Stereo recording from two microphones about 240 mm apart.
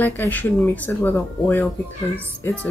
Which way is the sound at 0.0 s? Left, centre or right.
Centre.